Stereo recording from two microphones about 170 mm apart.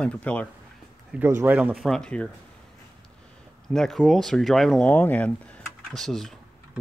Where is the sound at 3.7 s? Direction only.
Centre (ahead or behind).